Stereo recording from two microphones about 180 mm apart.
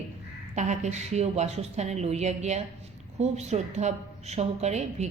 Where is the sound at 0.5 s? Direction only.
40° right (ahead or behind).